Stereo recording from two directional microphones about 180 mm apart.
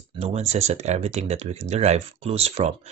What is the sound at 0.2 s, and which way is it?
Speech, 35° right (ahead or behind).